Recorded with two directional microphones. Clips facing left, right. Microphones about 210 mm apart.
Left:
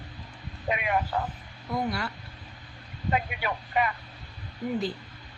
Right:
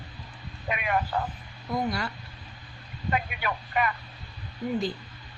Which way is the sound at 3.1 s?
25° left (ahead or behind).